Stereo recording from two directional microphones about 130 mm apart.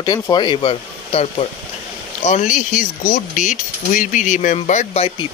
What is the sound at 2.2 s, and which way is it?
Speech, 70° left (ahead or behind).